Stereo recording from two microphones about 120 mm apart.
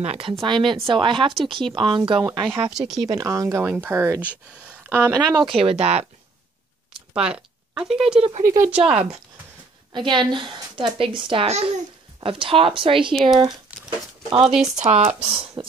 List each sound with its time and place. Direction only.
0.0 s speech: 55° right (ahead or behind)
2.7 s speech: 5° right (ahead or behind)
3.1 s speech: 25° right (ahead or behind)
5.4 s speech: 50° right (ahead or behind)
7.2 s speech: 5° right (ahead or behind)
9.9 s a woman's voice: 40° right (ahead or behind)
11.4 s a child's voice: 60° right (ahead or behind)
12.2 s speech: 45° right (ahead or behind)
13.1 s speech: centre (ahead or behind)
13.7 s a sound: 10° right (ahead or behind)
14.4 s speech: centre (ahead or behind)
14.8 s speech: 70° right (ahead or behind)
15.2 s speech: 45° right (ahead or behind)